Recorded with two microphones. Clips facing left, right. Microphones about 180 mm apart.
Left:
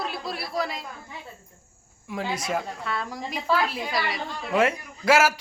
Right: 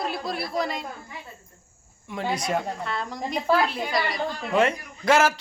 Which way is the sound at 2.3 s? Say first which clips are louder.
Right 4 dB; 5° left (ahead or behind).